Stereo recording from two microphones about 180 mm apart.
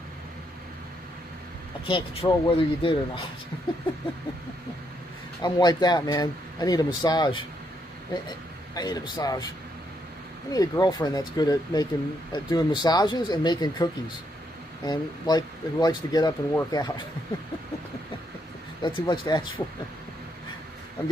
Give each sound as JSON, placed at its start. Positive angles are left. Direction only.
{"t": 1.9, "sound": "speech", "side_deg": 30}
{"t": 5.4, "sound": "speech", "side_deg": 25}
{"t": 8.7, "sound": "speech", "side_deg": 20}
{"t": 10.5, "sound": "speech", "side_deg": 20}
{"t": 14.9, "sound": "speech", "side_deg": 25}
{"t": 18.8, "sound": "speech", "side_deg": 25}